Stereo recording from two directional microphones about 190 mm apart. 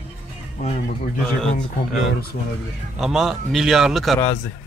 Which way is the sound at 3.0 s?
Centre (ahead or behind).